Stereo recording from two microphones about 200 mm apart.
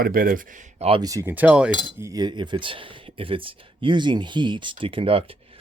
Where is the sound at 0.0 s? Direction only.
45° right (ahead or behind).